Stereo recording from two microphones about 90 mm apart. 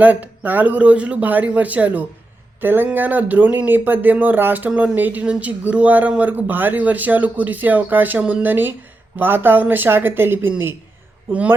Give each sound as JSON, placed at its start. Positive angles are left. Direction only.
{"t": 0.0, "sound": "speech", "side_deg": -15}
{"t": 11.3, "sound": "speech", "side_deg": -15}